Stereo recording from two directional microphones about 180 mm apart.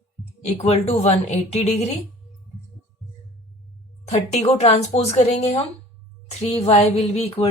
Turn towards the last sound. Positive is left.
turn(degrees=35)  # may be behind; listen again after turning